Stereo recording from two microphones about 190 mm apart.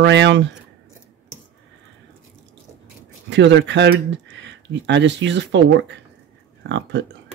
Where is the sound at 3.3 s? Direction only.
70° right (ahead or behind).